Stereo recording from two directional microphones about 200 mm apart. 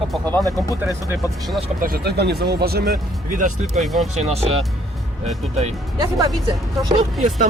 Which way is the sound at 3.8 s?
Centre (ahead or behind).